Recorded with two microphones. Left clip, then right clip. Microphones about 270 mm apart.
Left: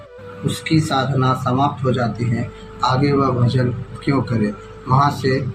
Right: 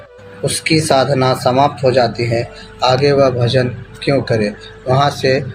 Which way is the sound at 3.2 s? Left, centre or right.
Centre.